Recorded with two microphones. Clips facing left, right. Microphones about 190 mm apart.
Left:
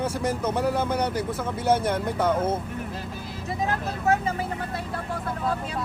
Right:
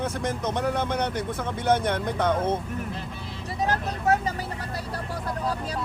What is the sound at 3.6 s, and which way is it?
Speech, 40° right (ahead or behind).